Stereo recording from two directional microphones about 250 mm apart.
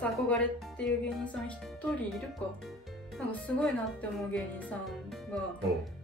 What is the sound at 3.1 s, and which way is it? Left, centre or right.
Speech, centre.